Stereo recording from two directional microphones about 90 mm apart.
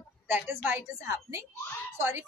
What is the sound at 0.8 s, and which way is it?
A woman's voice, 35° right (ahead or behind).